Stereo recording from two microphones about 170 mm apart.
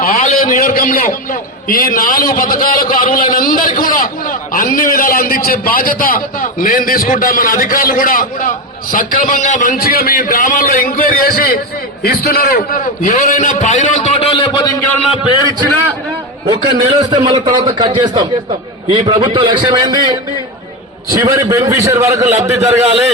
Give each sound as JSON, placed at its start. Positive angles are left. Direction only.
{"t": 0.0, "sound": "a man's voice", "side_deg": 55}
{"t": 16.5, "sound": "a man's voice", "side_deg": -25}
{"t": 21.1, "sound": "a man's voice", "side_deg": -20}